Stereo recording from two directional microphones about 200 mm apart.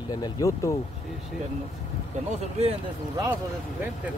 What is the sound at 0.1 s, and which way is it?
Speech, 20° left (ahead or behind).